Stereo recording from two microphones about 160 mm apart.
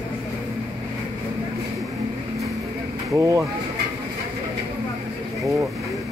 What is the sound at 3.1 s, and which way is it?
Speech, 20° right (ahead or behind).